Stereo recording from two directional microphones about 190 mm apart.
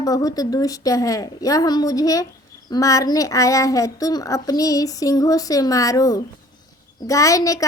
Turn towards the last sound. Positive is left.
turn(degrees=15)  # may be behind; listen again after turning